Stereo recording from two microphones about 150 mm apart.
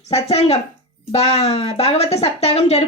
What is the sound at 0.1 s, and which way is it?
A woman's voice, 45° left (ahead or behind).